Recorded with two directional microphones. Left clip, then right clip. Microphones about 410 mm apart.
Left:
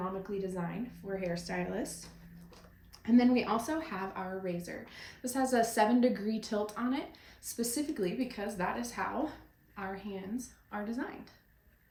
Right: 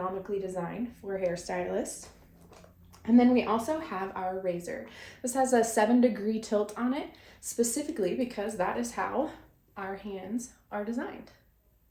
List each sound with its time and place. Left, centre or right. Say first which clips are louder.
0.2 s speech: right 4 dB; centre